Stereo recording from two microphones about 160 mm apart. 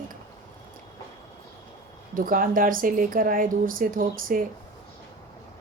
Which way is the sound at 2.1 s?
60° right (ahead or behind).